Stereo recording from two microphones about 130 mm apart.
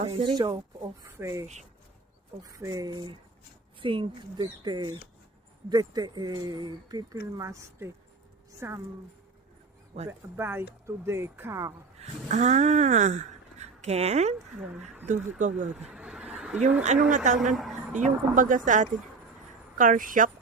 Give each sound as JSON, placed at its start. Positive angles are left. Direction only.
{"t": 0.0, "sound": "speech", "side_deg": -45}
{"t": 1.0, "sound": "a woman's voice", "side_deg": -20}
{"t": 10.1, "sound": "speech", "side_deg": -15}
{"t": 11.9, "sound": "speech", "side_deg": -60}
{"t": 15.4, "sound": "speech", "side_deg": -75}
{"t": 15.7, "sound": "a sound", "side_deg": -10}
{"t": 17.1, "sound": "speech", "side_deg": -75}
{"t": 17.5, "sound": "a woman's voice", "side_deg": 0}
{"t": 17.9, "sound": "speech", "side_deg": -85}
{"t": 19.8, "sound": "speech", "side_deg": -90}